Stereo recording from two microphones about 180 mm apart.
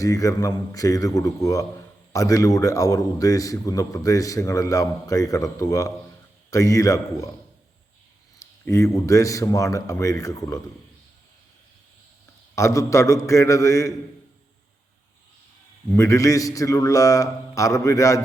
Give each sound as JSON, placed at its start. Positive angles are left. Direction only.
{"t": 0.0, "sound": "a man's voice", "side_deg": 20}
{"t": 8.6, "sound": "speech", "side_deg": 15}
{"t": 12.5, "sound": "speech", "side_deg": 15}
{"t": 16.0, "sound": "a man's voice", "side_deg": 15}